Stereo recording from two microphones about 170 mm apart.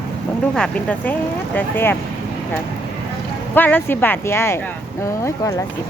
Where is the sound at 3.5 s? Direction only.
10° left (ahead or behind).